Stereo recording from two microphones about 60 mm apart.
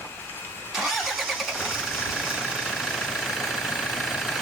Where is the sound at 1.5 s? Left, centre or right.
Centre.